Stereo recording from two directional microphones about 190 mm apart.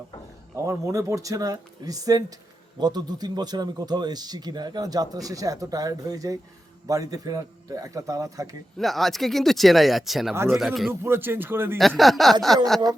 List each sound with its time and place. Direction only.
0.5 s a man's voice: 15° right (ahead or behind)
8.8 s speech: centre (ahead or behind)
11.0 s a man's voice: 10° right (ahead or behind)
11.8 s speech: centre (ahead or behind)